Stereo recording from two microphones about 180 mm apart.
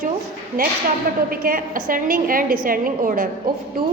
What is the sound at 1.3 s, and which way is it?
A woman's voice, 50° right (ahead or behind).